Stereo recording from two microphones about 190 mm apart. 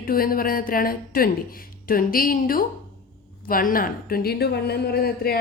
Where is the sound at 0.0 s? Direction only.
50° left (ahead or behind).